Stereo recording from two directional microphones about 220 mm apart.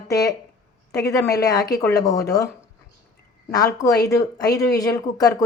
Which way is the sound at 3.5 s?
15° left (ahead or behind).